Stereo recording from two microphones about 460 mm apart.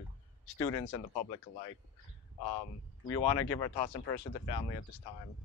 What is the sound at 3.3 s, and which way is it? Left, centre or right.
Speech, left.